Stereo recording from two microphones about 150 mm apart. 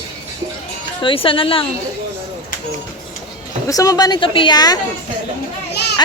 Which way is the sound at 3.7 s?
25° left (ahead or behind).